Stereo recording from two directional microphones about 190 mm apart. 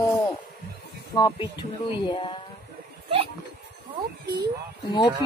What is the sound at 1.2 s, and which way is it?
Speech, 25° left (ahead or behind).